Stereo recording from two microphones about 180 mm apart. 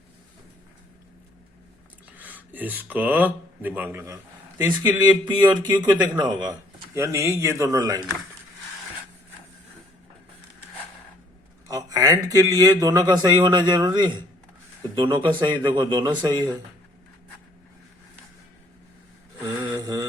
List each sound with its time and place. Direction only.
2.1 s speech: 10° right (ahead or behind)
11.7 s speech: 20° right (ahead or behind)
19.4 s a sound: 10° right (ahead or behind)
19.8 s mantra: 20° right (ahead or behind)